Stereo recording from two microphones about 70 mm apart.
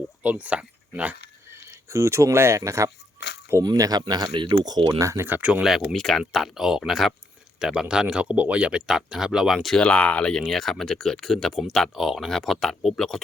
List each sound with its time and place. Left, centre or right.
0.2 s speech: centre
1.5 s speech: right
3.6 s speech: right
4.9 s speech: right
5.4 s speech: centre
5.6 s speech: centre
9.8 s speech: centre